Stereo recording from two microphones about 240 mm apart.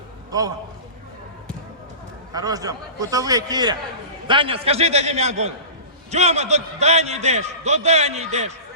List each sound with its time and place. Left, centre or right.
0.3 s a man's voice: centre
2.3 s a man's voice: centre